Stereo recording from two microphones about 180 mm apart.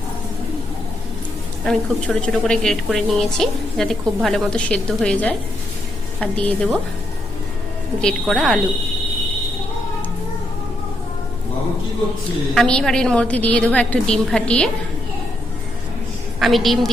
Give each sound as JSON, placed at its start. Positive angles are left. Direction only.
{"t": 1.6, "sound": "a woman's voice", "side_deg": 5}
{"t": 8.0, "sound": "a woman's voice", "side_deg": 0}
{"t": 12.5, "sound": "a woman's voice", "side_deg": 5}
{"t": 16.4, "sound": "a woman's voice", "side_deg": 0}